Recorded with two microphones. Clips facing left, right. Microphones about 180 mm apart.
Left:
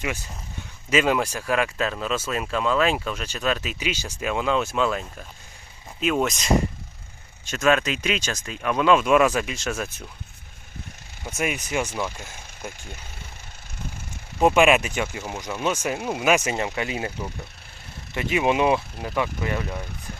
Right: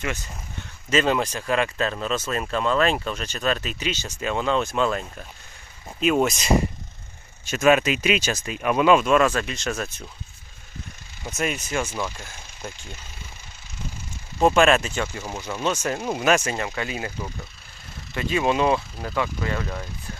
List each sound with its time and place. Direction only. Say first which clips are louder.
0.0 s speech: even; 10° left (ahead or behind)
7.5 s speech: right 3 dB; 5° right (ahead or behind)
9.0 s speech: left 1 dB; 15° left (ahead or behind)
11.3 s speech: even; 10° left (ahead or behind)
14.3 s speech: even; 15° left (ahead or behind)
16.4 s speech: left 1 dB; 20° left (ahead or behind)
18.1 s speech: even; 20° left (ahead or behind)